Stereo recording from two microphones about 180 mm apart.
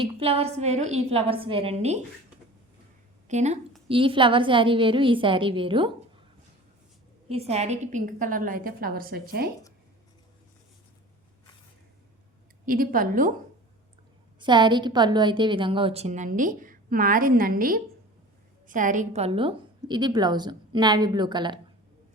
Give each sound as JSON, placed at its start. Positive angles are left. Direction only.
{"t": 0.2, "sound": "a woman's voice", "side_deg": -35}
{"t": 3.2, "sound": "a woman's voice", "side_deg": -40}
{"t": 7.3, "sound": "a woman's voice", "side_deg": -35}
{"t": 12.6, "sound": "a woman's voice", "side_deg": -50}
{"t": 14.3, "sound": "a woman's voice", "side_deg": -25}